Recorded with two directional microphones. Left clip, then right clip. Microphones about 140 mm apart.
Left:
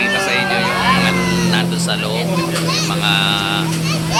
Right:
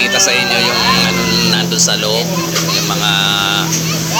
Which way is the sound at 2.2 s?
Centre (ahead or behind).